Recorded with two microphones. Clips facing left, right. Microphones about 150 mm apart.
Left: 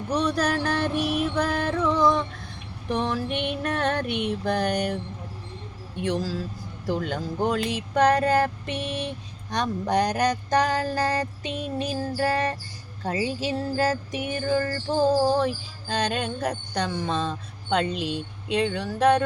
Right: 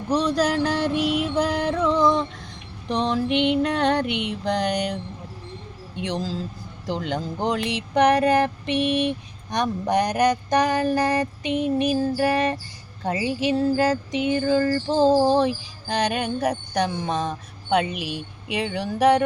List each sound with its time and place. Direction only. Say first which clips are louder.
0.1 s music: right 3 dB; 15° right (ahead or behind)
2.9 s speech: right 3 dB; 20° right (ahead or behind)
3.3 s a sound: right 8 dB; 70° right (ahead or behind)
3.6 s music: right 5 dB; 15° right (ahead or behind)
6.0 s speech: left 1 dB; 20° right (ahead or behind)
7.8 s music: right 3 dB; 15° right (ahead or behind)
8.7 s a sound: right 8 dB; 65° right (ahead or behind)
9.0 s music: right 7 dB; 15° right (ahead or behind)